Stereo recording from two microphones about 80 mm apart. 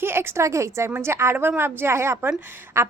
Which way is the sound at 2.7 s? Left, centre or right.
Right.